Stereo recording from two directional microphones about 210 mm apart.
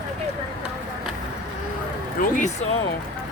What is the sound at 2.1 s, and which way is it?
Speech, 40° left (ahead or behind).